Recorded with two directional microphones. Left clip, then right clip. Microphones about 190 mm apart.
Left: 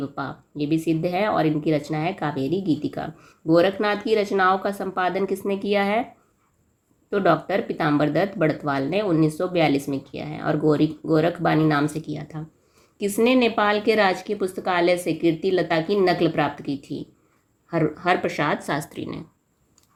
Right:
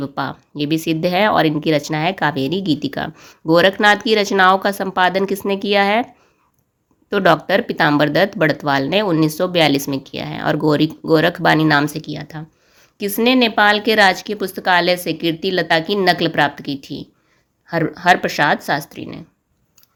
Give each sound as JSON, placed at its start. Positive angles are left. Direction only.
{"t": 0.0, "sound": "speech", "side_deg": -45}
{"t": 7.1, "sound": "speech", "side_deg": -45}
{"t": 18.9, "sound": "speech", "side_deg": -15}